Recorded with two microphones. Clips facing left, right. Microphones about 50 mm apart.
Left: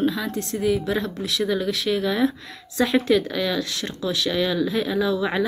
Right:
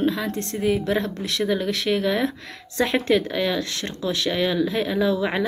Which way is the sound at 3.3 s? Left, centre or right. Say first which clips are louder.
Right 1 dB; right.